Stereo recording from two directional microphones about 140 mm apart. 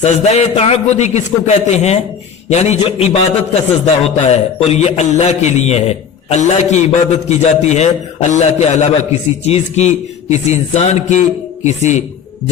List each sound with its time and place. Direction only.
0.0 s a man's voice: 55° left (ahead or behind)